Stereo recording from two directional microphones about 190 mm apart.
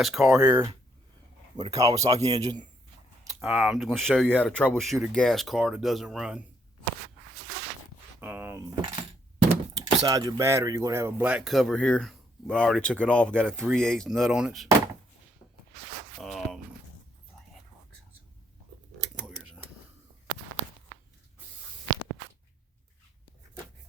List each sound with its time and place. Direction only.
0.0 s speech: centre (ahead or behind)
0.3 s speech: 20° right (ahead or behind)
2.1 s a man's voice: 35° right (ahead or behind)
3.4 s speech: centre (ahead or behind)
8.2 s speech: 10° right (ahead or behind)
16.2 s speech: centre (ahead or behind)
18.9 s a sound: 60° right (ahead or behind)
19.2 s a sound: 5° right (ahead or behind)